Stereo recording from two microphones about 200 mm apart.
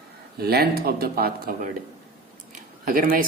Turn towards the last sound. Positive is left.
turn(degrees=-45)  # may be behind; listen again after turning